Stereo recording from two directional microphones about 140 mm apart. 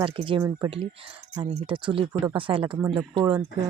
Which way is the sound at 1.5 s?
40° right (ahead or behind).